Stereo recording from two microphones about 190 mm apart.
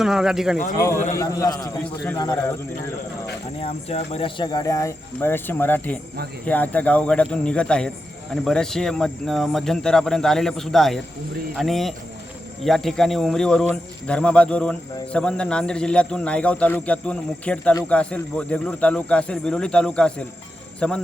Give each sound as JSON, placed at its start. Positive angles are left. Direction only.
{"t": 0.0, "sound": "speech", "side_deg": -5}
{"t": 0.8, "sound": "a man's voice", "side_deg": 15}
{"t": 3.6, "sound": "speech", "side_deg": 35}